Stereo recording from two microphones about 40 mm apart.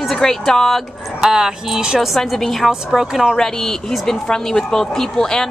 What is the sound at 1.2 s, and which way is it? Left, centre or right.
Speech, centre.